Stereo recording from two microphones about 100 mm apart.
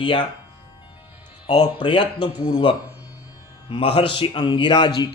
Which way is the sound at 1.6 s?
55° left (ahead or behind).